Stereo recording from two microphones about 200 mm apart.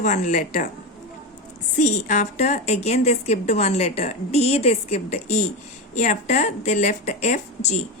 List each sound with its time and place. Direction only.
0.0 s a woman's voice: 40° left (ahead or behind)
1.8 s a woman's voice: 35° left (ahead or behind)